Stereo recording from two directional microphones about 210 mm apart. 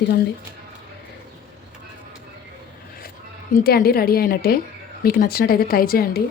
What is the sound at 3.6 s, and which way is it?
Speech, 45° left (ahead or behind).